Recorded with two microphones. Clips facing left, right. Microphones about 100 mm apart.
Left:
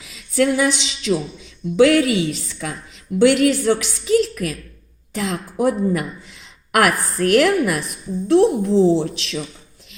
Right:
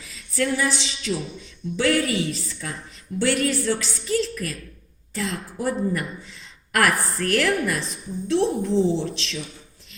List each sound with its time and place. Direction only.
0.1 s a sound: 65° left (ahead or behind)
1.4 s speech: 65° left (ahead or behind)
2.0 s a woman's voice: 20° left (ahead or behind)
2.3 s a woman's voice: 70° left (ahead or behind)